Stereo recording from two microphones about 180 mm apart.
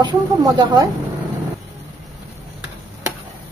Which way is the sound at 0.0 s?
25° right (ahead or behind).